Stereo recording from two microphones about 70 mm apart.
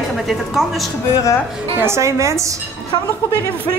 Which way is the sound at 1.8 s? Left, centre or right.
Right.